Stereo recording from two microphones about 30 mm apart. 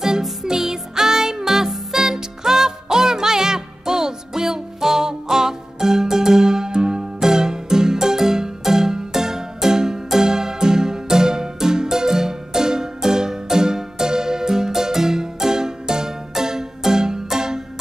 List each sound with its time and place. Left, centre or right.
0.2 s music: centre